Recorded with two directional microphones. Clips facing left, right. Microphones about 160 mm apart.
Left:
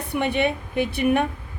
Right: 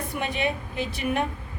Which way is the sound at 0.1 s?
65° left (ahead or behind).